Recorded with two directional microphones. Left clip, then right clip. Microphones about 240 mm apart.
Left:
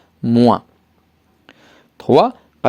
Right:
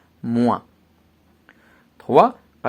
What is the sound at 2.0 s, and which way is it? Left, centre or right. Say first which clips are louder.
Speech: left 2 dB; left.